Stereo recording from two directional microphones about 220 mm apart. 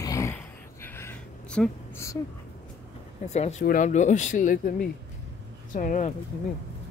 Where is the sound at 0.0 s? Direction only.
15° left (ahead or behind).